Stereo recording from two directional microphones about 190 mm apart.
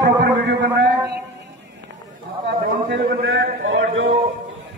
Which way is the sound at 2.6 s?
65° right (ahead or behind).